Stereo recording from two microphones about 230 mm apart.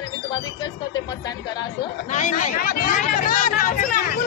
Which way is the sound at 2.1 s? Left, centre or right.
Left.